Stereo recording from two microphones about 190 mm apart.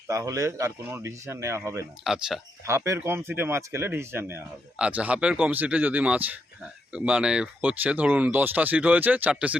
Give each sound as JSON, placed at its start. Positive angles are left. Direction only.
{"t": 0.1, "sound": "speech", "side_deg": -15}
{"t": 2.0, "sound": "speech", "side_deg": -5}
{"t": 2.6, "sound": "speech", "side_deg": -15}